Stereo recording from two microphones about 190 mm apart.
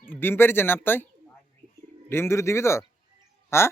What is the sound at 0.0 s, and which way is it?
Speech, 10° left (ahead or behind).